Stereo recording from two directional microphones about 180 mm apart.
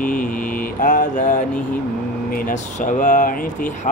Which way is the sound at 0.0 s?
50° left (ahead or behind).